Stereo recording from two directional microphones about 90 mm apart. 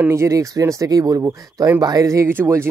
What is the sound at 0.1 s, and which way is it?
Speech, 35° right (ahead or behind).